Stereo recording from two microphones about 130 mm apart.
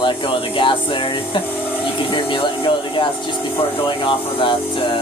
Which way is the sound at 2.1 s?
40° left (ahead or behind).